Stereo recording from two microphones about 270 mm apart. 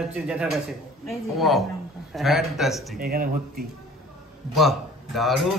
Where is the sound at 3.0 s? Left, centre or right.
Right.